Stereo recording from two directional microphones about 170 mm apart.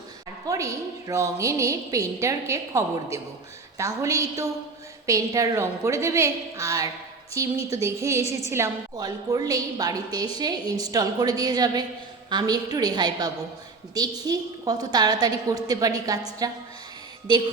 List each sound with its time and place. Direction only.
0.4 s a woman's voice: 20° right (ahead or behind)